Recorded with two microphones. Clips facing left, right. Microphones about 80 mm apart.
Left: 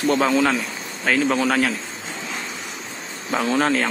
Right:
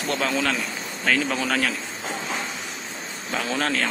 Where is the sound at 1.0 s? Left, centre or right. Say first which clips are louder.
Left 4 dB; centre.